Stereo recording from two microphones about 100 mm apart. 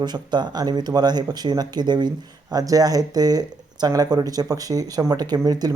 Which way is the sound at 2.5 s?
40° right (ahead or behind).